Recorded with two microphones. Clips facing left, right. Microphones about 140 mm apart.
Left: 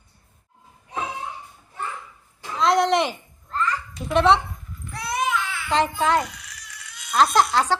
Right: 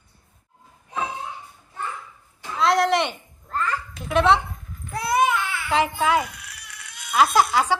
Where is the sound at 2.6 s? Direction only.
Centre (ahead or behind).